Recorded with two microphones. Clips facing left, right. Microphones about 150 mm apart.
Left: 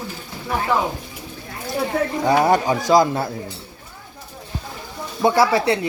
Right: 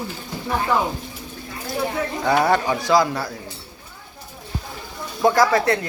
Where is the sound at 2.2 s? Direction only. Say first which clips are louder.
Left 1 dB; 20° left (ahead or behind).